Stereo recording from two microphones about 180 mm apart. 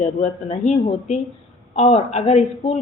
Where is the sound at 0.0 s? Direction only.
40° left (ahead or behind).